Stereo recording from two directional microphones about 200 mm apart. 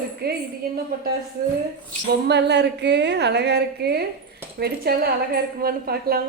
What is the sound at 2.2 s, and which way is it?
A woman's voice, 55° right (ahead or behind).